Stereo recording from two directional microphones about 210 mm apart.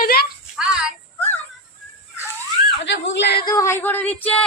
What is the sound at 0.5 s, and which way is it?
Speech, 5° right (ahead or behind).